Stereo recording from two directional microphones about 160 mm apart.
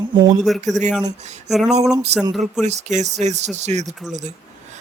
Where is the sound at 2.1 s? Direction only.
45° right (ahead or behind).